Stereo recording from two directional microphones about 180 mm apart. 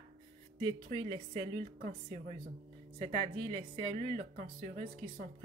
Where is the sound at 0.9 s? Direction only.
30° right (ahead or behind).